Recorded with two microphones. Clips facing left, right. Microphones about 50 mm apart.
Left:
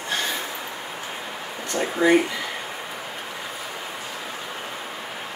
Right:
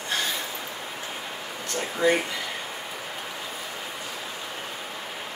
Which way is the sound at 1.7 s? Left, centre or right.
Centre.